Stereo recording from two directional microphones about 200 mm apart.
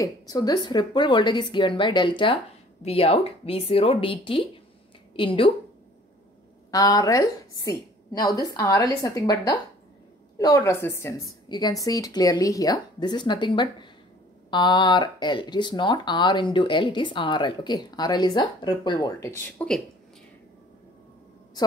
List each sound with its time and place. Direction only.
0.0 s a woman's voice: 20° left (ahead or behind)
6.7 s a woman's voice: 20° left (ahead or behind)